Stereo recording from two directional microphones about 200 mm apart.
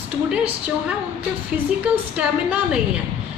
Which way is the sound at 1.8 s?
5° right (ahead or behind).